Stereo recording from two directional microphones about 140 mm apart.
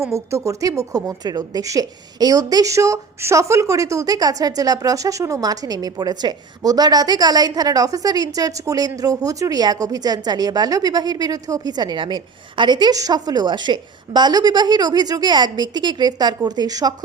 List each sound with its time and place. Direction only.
0.1 s a woman's voice: 20° right (ahead or behind)